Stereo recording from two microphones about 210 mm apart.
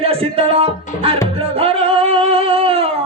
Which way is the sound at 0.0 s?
25° right (ahead or behind).